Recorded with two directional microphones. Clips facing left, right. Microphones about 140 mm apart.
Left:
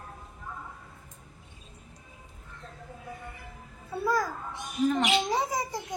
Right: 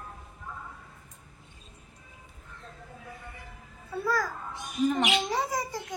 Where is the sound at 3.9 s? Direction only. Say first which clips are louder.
Left 1 dB; 15° left (ahead or behind).